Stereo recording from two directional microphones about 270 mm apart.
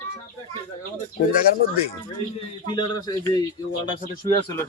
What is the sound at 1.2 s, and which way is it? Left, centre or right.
Speech, left.